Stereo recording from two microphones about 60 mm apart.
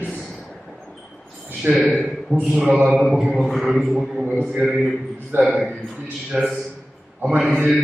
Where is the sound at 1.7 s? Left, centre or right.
Right.